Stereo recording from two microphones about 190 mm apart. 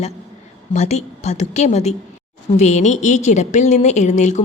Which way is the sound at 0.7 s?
35° left (ahead or behind).